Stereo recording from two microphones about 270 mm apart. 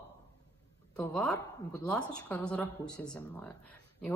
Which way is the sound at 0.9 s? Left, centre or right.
Centre.